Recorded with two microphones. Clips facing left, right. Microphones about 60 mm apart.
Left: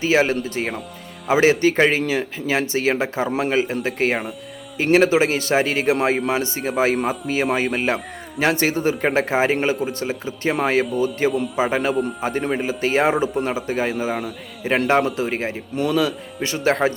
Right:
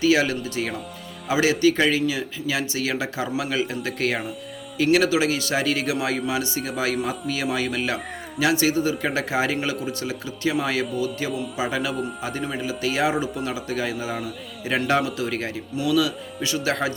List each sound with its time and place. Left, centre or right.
0.0 s a man's voice: left
14.1 s a man's voice: centre
14.9 s a man's voice: left
15.7 s a man's voice: left